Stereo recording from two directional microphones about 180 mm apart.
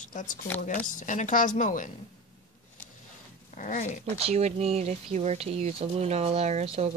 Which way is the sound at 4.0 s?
35° right (ahead or behind).